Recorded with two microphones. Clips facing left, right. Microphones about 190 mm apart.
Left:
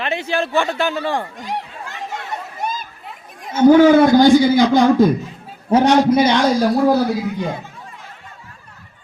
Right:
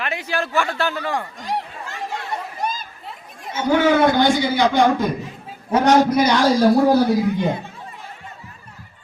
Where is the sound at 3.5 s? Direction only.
40° left (ahead or behind).